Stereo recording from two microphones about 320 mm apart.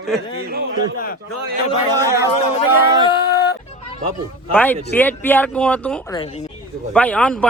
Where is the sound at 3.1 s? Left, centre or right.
Centre.